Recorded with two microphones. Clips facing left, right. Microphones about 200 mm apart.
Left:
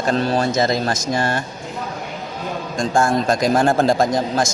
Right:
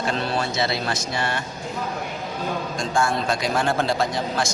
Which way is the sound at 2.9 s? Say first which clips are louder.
Left 5 dB; 45° left (ahead or behind).